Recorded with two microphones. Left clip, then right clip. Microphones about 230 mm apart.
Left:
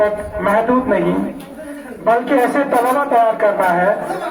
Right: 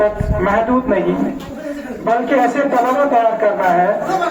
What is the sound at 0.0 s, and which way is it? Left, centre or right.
Speech, left.